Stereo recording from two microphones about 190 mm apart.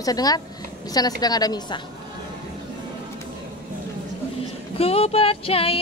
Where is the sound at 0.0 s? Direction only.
20° left (ahead or behind).